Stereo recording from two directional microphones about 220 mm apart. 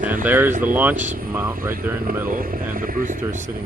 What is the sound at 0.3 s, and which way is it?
Speech, 10° right (ahead or behind).